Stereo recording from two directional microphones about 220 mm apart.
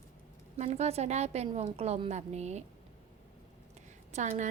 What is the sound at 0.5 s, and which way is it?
A woman's voice, 30° right (ahead or behind).